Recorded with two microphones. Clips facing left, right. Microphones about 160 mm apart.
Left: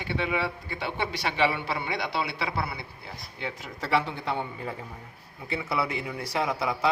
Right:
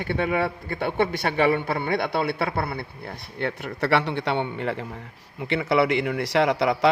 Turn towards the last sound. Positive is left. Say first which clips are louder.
# right 6 dB
turn(degrees=-75)  # may be behind; listen again after turning